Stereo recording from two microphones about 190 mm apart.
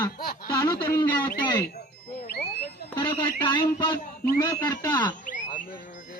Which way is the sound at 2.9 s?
25° left (ahead or behind).